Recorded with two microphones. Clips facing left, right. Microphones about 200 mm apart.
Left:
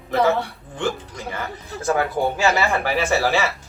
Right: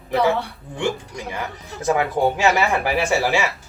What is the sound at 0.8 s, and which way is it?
Speech, 15° right (ahead or behind).